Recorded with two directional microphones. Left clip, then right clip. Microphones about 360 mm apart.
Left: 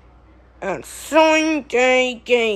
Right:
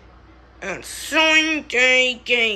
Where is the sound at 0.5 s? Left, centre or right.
Centre.